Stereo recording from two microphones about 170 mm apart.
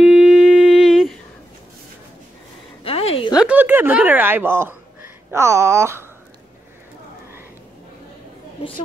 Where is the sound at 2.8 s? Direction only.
35° left (ahead or behind).